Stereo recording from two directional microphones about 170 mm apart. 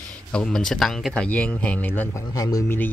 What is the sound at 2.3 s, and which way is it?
Speech, 20° left (ahead or behind).